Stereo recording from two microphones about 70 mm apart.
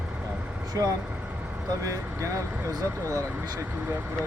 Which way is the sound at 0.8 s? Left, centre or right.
Right.